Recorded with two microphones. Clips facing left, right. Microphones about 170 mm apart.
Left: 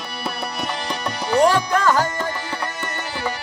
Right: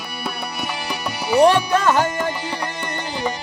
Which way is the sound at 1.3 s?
20° right (ahead or behind).